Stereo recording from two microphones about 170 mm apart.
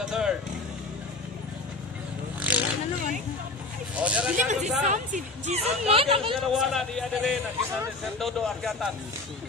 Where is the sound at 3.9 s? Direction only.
5° right (ahead or behind).